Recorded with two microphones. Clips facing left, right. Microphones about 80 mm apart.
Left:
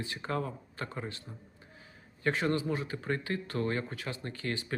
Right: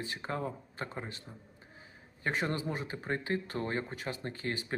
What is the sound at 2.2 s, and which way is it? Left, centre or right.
Speech, right.